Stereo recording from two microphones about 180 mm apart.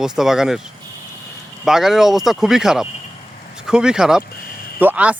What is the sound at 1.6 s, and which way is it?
Speech, centre (ahead or behind).